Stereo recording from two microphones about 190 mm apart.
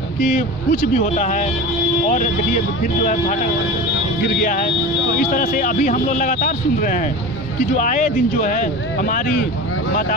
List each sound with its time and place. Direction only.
0.3 s speech: 40° left (ahead or behind)
4.4 s speech: 50° left (ahead or behind)